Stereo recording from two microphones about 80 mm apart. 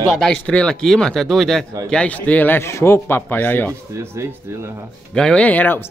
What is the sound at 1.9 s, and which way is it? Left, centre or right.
A man's voice, centre.